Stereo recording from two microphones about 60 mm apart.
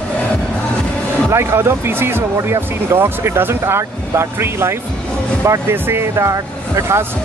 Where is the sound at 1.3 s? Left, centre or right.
Right.